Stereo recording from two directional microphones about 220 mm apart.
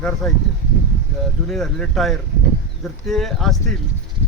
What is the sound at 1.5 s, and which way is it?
Speech, centre (ahead or behind).